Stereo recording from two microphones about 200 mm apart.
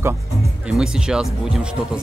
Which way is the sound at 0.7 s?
5° right (ahead or behind).